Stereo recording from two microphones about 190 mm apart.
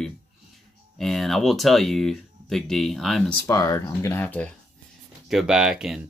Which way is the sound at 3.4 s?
20° left (ahead or behind).